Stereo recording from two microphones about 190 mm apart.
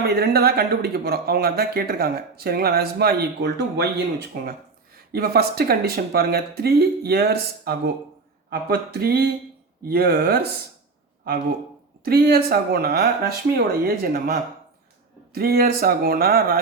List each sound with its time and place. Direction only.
0.0 s speech: 55° right (ahead or behind)
5.1 s speech: 55° right (ahead or behind)
12.0 s speech: 55° right (ahead or behind)